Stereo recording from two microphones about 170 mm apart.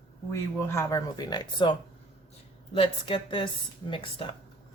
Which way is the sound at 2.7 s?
30° left (ahead or behind).